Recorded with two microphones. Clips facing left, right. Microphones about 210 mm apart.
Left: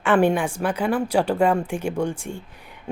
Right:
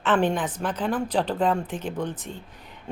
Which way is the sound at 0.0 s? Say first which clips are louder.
Left 4 dB; 10° left (ahead or behind).